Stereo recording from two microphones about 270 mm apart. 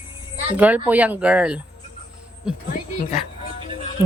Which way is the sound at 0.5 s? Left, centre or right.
Centre.